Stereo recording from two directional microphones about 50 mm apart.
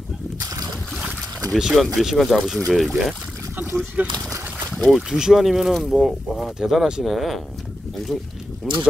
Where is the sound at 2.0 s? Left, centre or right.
Centre.